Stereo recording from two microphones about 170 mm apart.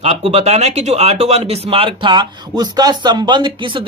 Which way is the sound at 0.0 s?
35° right (ahead or behind).